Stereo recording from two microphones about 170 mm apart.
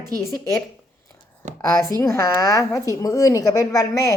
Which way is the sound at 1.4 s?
45° right (ahead or behind).